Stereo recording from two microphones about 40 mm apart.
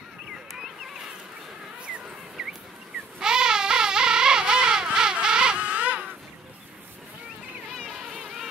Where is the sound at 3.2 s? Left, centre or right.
Centre.